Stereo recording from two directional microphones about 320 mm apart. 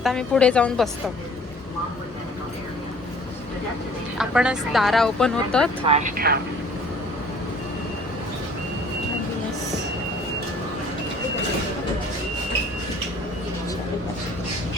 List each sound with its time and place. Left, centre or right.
0.0 s speech: centre
4.2 s speech: centre
5.8 s speech: right